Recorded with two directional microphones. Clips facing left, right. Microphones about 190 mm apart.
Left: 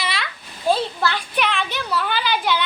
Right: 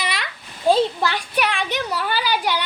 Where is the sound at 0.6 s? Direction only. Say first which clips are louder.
Right 3 dB; 15° right (ahead or behind).